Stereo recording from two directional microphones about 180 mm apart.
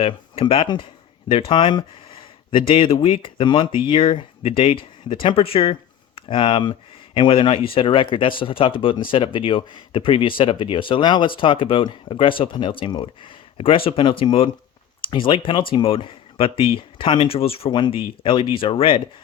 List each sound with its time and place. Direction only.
0.0 s speech: 30° left (ahead or behind)